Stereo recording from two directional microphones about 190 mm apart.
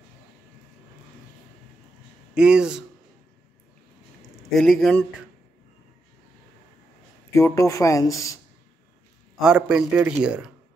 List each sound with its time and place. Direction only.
2.3 s a man's voice: 5° right (ahead or behind)
4.5 s a man's voice: centre (ahead or behind)
7.3 s speech: 15° left (ahead or behind)
9.4 s a man's voice: 5° right (ahead or behind)